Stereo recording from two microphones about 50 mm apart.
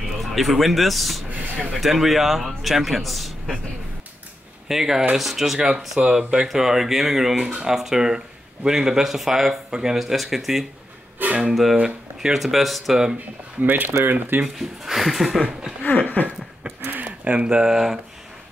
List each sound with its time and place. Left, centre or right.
0.2 s a man's voice: centre
1.3 s a sound: right
1.8 s a man's voice: centre
4.6 s a man's voice: centre
5.9 s speech: centre
9.9 s a man's voice: centre
11.2 s speech: right
11.7 s speech: right
12.3 s a man's voice: centre
13.6 s speech: right
14.4 s a man's voice: centre
16.2 s a sound: left
16.6 s a sound: right
17.2 s speech: right